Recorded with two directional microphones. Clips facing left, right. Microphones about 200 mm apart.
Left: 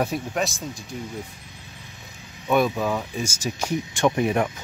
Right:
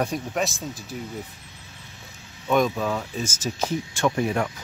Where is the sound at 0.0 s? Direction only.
5° left (ahead or behind).